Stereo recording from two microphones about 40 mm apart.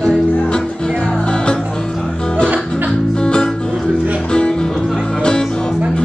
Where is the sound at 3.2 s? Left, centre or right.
Left.